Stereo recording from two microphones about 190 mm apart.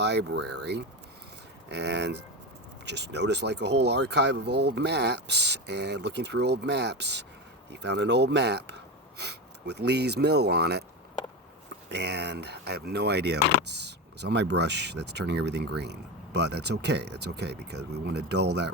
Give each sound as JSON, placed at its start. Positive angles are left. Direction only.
{"t": 0.0, "sound": "speech", "side_deg": -65}
{"t": 11.9, "sound": "speech", "side_deg": -65}